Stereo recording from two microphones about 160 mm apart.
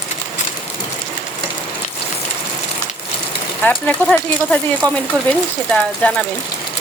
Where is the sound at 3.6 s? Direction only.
10° left (ahead or behind).